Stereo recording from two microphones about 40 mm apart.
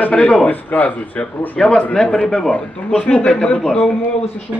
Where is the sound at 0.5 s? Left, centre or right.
Left.